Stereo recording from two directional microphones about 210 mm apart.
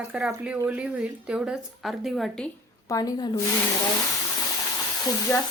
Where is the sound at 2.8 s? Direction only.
15° left (ahead or behind).